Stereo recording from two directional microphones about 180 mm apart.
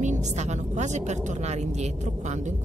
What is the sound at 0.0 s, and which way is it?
A woman's voice, 40° right (ahead or behind).